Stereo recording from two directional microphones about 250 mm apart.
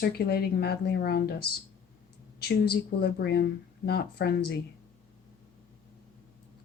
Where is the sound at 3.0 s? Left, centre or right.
Left.